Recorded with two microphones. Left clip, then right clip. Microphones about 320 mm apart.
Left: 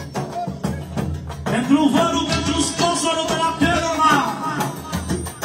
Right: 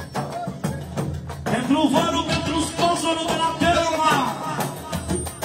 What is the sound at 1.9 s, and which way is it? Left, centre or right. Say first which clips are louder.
Music: left 2 dB; right.